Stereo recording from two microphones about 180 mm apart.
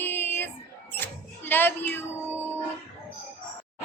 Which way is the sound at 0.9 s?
10° left (ahead or behind).